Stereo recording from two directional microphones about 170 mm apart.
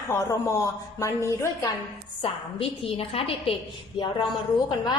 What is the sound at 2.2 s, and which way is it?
A woman's voice, 35° left (ahead or behind).